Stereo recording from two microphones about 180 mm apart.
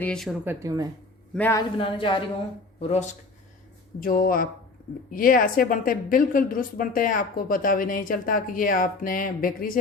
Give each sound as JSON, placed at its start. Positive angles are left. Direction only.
{"t": 0.0, "sound": "speech", "side_deg": 5}
{"t": 0.4, "sound": "a woman's voice", "side_deg": -20}
{"t": 1.3, "sound": "a man's voice", "side_deg": 10}
{"t": 1.8, "sound": "a woman's voice", "side_deg": 30}
{"t": 2.8, "sound": "speech", "side_deg": 40}
{"t": 4.0, "sound": "a woman's voice", "side_deg": 55}